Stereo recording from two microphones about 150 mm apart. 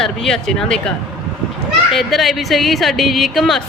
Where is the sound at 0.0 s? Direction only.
5° left (ahead or behind).